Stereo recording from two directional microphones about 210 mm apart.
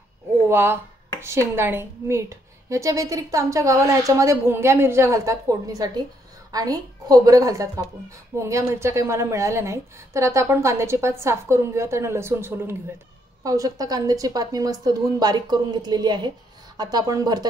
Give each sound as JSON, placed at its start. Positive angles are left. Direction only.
{"t": 0.5, "sound": "a woman's voice", "side_deg": -10}